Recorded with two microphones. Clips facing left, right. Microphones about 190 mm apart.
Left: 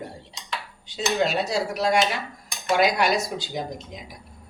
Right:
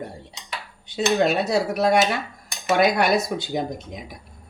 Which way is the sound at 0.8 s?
60° right (ahead or behind).